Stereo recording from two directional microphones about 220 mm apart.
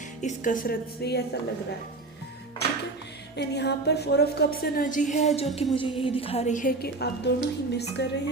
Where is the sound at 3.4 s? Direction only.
50° left (ahead or behind).